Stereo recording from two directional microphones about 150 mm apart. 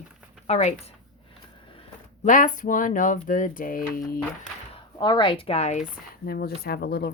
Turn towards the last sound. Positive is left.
turn(degrees=90)